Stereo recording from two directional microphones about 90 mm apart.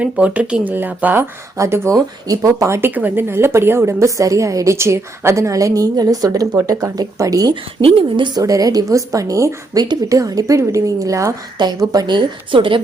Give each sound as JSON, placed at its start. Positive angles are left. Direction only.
{"t": 0.0, "sound": "speech", "side_deg": -15}
{"t": 1.5, "sound": "a woman's voice", "side_deg": -30}
{"t": 7.5, "sound": "a woman's voice", "side_deg": -85}
{"t": 8.4, "sound": "a woman's voice", "side_deg": -40}
{"t": 11.5, "sound": "a woman's voice", "side_deg": -50}